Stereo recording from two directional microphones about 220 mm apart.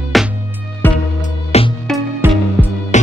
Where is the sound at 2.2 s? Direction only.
10° right (ahead or behind).